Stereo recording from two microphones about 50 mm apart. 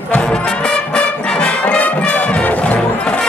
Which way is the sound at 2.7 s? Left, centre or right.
Left.